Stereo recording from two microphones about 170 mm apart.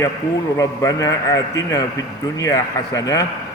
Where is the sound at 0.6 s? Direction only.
20° left (ahead or behind).